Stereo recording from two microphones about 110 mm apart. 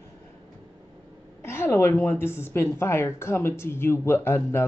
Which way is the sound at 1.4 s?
25° left (ahead or behind).